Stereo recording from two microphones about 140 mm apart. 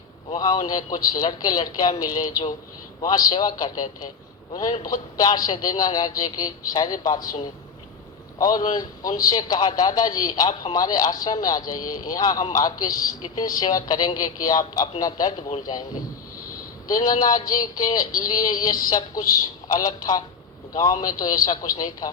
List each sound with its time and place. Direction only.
0.3 s a man's voice: 30° left (ahead or behind)
8.4 s a man's voice: 30° left (ahead or behind)
16.9 s a man's voice: 30° left (ahead or behind)